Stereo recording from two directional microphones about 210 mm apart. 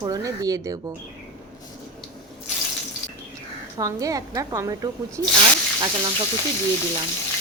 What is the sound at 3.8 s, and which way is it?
A woman's voice, 15° right (ahead or behind).